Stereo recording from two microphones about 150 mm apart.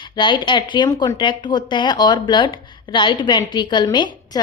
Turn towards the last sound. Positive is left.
turn(degrees=30)  # may be behind; listen again after turning